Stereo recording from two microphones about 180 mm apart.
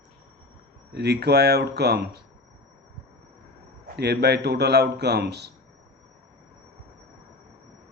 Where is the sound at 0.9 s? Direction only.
65° right (ahead or behind).